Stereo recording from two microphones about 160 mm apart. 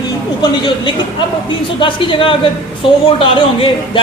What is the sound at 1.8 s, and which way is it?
A man's voice, 30° left (ahead or behind).